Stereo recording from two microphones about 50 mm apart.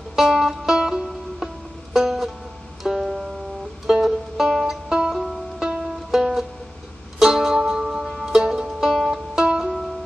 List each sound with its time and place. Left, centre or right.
0.1 s music: centre
4.8 s music: centre
9.1 s music: centre
9.6 s music: centre